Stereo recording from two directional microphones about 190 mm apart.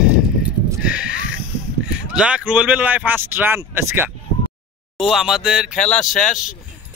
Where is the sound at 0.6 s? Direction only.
5° right (ahead or behind).